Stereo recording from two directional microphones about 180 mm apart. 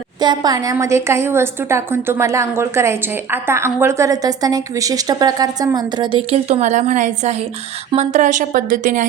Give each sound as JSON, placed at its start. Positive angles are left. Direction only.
{"t": 0.2, "sound": "a woman's voice", "side_deg": -20}